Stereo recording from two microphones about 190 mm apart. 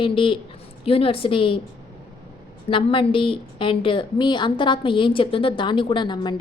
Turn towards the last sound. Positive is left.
turn(degrees=25)  # may be behind; listen again after turning